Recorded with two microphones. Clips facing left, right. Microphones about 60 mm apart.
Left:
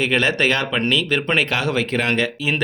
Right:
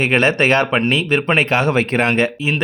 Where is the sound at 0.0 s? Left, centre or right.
Right.